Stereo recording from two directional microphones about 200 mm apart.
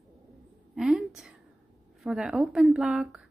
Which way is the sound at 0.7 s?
5° right (ahead or behind).